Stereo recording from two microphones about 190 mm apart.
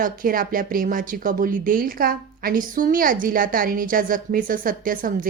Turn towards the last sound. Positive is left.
turn(degrees=-45)  # may be behind; listen again after turning